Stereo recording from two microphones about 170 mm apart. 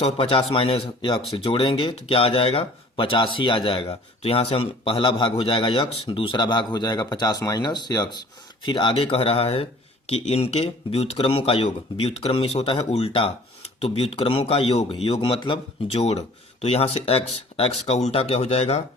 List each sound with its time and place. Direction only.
0.0 s speech: 30° left (ahead or behind)